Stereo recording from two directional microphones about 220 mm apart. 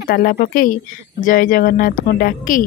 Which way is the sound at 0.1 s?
40° left (ahead or behind).